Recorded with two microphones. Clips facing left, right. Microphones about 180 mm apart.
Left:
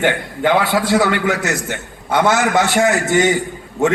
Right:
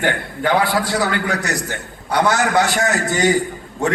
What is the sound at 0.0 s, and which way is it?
A man's voice, 25° left (ahead or behind).